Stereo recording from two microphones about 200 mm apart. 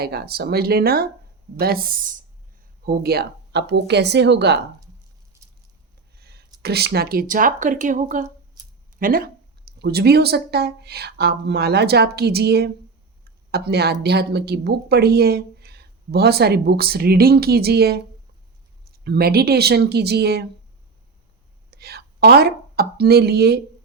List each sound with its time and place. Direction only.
0.0 s a woman's voice: 50° right (ahead or behind)
6.1 s a sound: 50° right (ahead or behind)
6.6 s a woman's voice: 55° right (ahead or behind)
8.6 s a sound: 20° right (ahead or behind)
9.0 s a woman's voice: 45° right (ahead or behind)
21.7 s a woman's voice: 50° right (ahead or behind)